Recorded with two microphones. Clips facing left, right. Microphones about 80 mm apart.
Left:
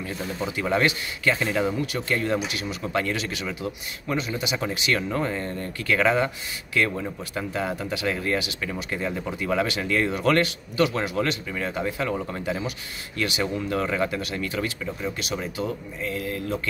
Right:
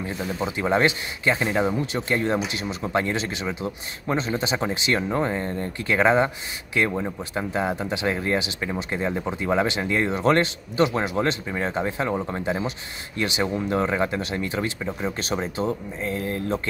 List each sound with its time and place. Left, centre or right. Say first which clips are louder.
0.0 s speech: right 2 dB; right